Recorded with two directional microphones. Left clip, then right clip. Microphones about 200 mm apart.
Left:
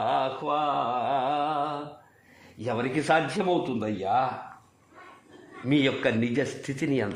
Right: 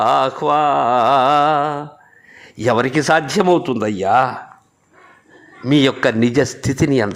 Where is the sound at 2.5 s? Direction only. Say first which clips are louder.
Right 13 dB; 45° right (ahead or behind).